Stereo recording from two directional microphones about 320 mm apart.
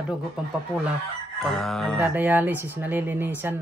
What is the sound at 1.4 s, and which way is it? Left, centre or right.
Speech, centre.